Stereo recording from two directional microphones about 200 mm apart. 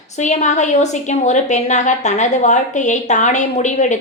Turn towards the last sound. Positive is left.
turn(degrees=35)  # may be behind; listen again after turning